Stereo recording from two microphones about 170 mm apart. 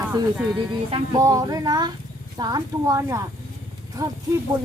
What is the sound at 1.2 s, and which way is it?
A woman's voice, 20° right (ahead or behind).